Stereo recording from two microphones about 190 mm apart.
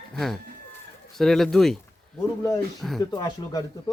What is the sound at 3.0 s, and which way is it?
Speech, 20° left (ahead or behind).